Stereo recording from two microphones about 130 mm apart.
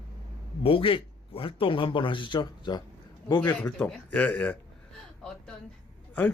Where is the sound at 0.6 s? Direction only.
45° left (ahead or behind).